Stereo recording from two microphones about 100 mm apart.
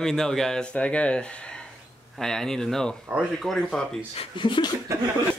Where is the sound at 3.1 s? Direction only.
15° right (ahead or behind).